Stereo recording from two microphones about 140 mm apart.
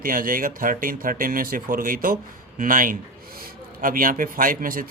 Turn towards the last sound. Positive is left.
turn(degrees=-85)